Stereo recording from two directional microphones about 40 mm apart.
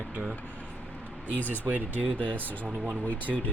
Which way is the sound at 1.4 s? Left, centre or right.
Left.